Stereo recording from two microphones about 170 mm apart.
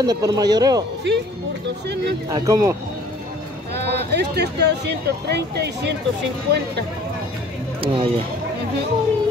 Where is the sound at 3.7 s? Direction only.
80° right.